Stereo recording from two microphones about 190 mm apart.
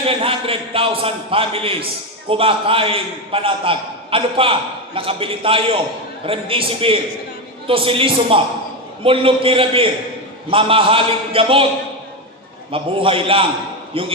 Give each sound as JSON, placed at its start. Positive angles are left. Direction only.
{"t": 0.0, "sound": "a man's voice", "side_deg": -30}
{"t": 12.7, "sound": "a man's voice", "side_deg": -30}